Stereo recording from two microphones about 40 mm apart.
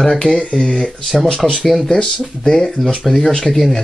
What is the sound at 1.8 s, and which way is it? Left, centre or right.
Speech, centre.